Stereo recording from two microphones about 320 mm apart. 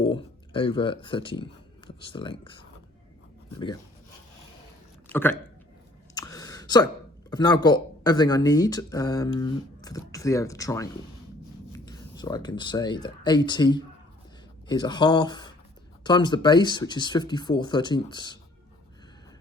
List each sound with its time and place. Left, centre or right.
0.0 s speech: centre
5.1 s speech: centre
6.1 s a sound: centre
7.3 s speech: centre